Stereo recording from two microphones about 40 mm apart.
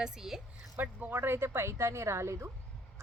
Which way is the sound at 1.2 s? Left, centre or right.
Right.